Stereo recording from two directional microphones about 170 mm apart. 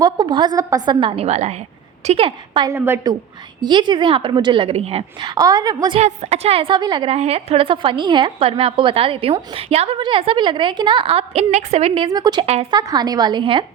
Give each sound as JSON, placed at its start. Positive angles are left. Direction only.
{"t": 0.0, "sound": "a woman's voice", "side_deg": -25}
{"t": 2.7, "sound": "a woman's voice", "side_deg": -15}
{"t": 5.3, "sound": "a woman's voice", "side_deg": -20}
{"t": 6.0, "sound": "a woman's voice", "side_deg": -40}
{"t": 12.0, "sound": "a woman's voice", "side_deg": -25}